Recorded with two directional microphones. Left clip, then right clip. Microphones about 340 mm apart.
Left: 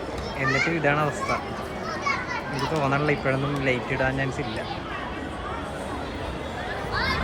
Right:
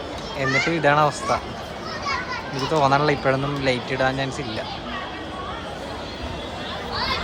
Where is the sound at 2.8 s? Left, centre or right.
Centre.